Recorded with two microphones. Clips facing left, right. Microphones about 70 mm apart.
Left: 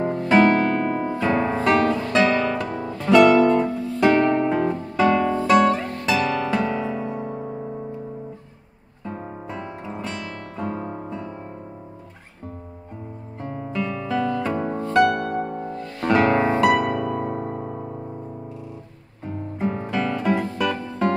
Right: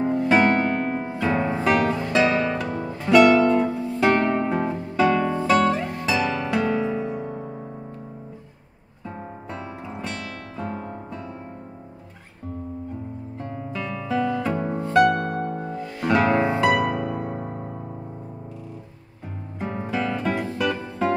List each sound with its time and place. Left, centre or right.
0.0 s music: centre
2.8 s guitar: centre
3.2 s music: centre
5.2 s music: centre
9.0 s music: centre
13.4 s music: centre
13.7 s music: centre
19.6 s music: centre